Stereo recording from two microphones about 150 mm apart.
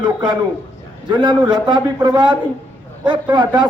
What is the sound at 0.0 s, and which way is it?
A man's voice, 30° right (ahead or behind).